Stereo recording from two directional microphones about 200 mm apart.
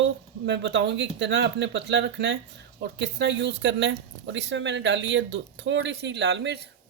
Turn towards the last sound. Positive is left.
turn(degrees=-60)  # may be behind; listen again after turning